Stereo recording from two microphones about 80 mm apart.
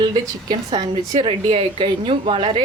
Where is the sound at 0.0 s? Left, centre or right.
Right.